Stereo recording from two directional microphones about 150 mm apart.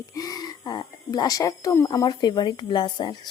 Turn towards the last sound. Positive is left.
turn(degrees=30)  # may be behind; listen again after turning